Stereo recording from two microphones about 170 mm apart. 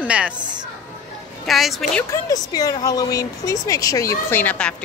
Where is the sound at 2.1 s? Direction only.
20° left (ahead or behind).